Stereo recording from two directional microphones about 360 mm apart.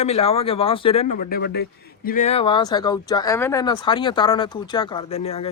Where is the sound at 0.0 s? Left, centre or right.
Centre.